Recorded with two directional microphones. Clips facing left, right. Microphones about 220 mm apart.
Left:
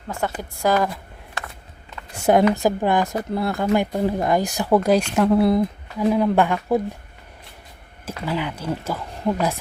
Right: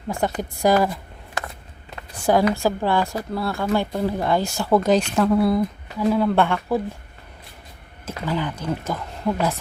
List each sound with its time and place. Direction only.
0.1 s speech: 15° right (ahead or behind)
2.1 s speech: 20° left (ahead or behind)
5.3 s speech: 20° left (ahead or behind)
8.0 s speech: 10° left (ahead or behind)